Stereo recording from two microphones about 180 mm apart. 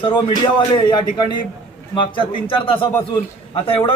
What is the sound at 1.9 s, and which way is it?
A man's voice, 25° left (ahead or behind).